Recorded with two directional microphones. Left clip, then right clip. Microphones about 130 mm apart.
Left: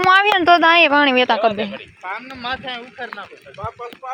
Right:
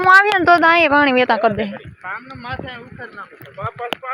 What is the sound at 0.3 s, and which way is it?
Speech, 20° right (ahead or behind).